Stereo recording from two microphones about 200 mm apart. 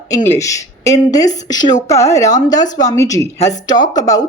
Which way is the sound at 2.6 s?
40° left (ahead or behind).